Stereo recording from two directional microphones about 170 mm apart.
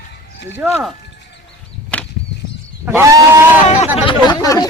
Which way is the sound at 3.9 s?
30° left (ahead or behind).